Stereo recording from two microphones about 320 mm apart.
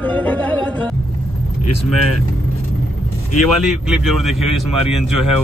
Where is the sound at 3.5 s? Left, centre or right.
Centre.